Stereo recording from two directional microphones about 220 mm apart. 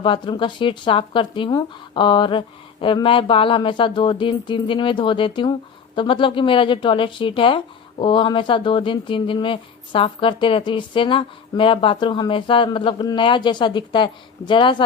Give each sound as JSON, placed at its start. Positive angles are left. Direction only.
{"t": 0.0, "sound": "speech", "side_deg": 20}